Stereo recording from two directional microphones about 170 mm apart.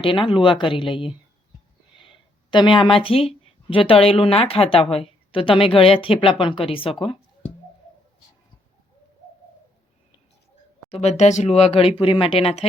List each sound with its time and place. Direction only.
0.0 s speech: 30° left (ahead or behind)
10.9 s speech: 40° left (ahead or behind)